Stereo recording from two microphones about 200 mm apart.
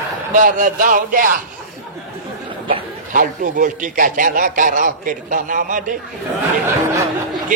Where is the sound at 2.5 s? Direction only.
25° right (ahead or behind).